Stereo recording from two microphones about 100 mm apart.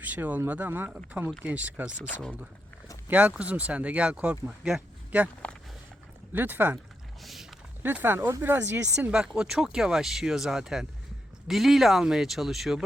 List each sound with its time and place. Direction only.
0.0 s speech: 15° right (ahead or behind)
3.1 s speech: 15° right (ahead or behind)
6.3 s speech: 20° right (ahead or behind)
7.2 s vehicle: centre (ahead or behind)
7.8 s speech: 20° right (ahead or behind)
9.0 s speech: 5° right (ahead or behind)